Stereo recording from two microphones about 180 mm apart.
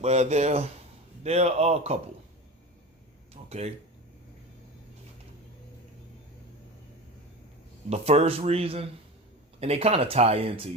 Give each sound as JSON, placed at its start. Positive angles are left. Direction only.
{"t": 0.0, "sound": "speech", "side_deg": -40}
{"t": 3.3, "sound": "a sound", "side_deg": -35}
{"t": 7.9, "sound": "speech", "side_deg": -35}